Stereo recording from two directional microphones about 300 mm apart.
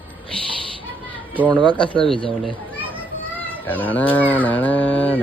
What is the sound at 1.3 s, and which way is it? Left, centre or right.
Speech, centre.